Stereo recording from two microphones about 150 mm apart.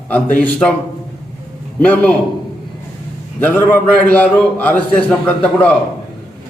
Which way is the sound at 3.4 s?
10° left (ahead or behind).